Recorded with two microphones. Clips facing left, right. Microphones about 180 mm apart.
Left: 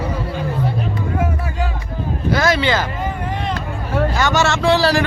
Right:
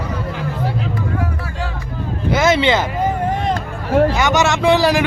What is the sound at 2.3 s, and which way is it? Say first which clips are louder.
Vehicle: right 2 dB; 20° right (ahead or behind).